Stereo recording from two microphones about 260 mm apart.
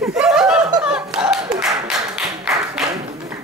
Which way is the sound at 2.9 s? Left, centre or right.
Right.